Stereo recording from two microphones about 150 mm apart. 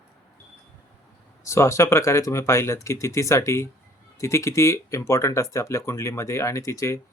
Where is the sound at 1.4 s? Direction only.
20° left (ahead or behind).